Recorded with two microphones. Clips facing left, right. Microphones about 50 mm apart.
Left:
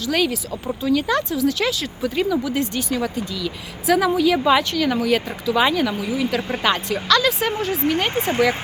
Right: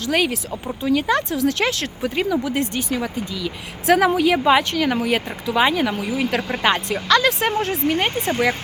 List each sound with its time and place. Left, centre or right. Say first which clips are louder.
0.0 s speech: even; right
1.3 s speech: even; right
2.0 s speech: left 1 dB; right
3.0 s speech: left 1 dB; centre
3.8 s speech: right 1 dB; right
4.7 s speech: left 1 dB; right
6.0 s speech: even; right
6.6 s speech: right 2 dB; right
8.1 s speech: left 1 dB; left